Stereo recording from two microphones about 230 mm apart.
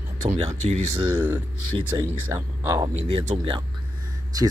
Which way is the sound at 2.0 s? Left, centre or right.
Centre.